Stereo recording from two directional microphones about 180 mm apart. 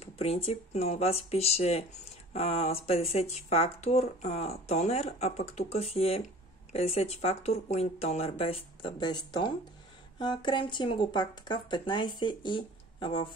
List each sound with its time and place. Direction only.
0.0 s speech: 35° left (ahead or behind)